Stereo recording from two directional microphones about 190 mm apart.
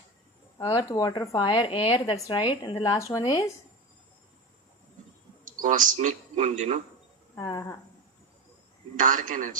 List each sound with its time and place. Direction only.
0.6 s a woman's voice: 15° left (ahead or behind)
5.5 s a man's voice: 45° right (ahead or behind)
7.3 s a woman's voice: 20° left (ahead or behind)
9.0 s a man's voice: 40° right (ahead or behind)